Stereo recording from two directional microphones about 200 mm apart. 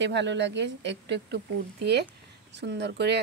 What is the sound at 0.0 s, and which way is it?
Speech, 60° right (ahead or behind).